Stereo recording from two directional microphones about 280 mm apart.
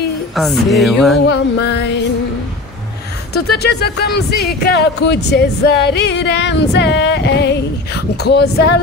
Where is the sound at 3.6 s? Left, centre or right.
Left.